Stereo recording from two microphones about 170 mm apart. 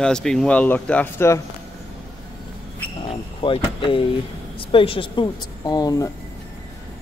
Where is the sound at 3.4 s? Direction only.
30° left (ahead or behind).